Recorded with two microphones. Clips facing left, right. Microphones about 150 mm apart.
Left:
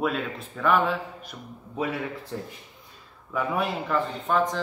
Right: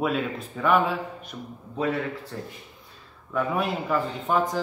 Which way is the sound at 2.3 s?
20° left (ahead or behind).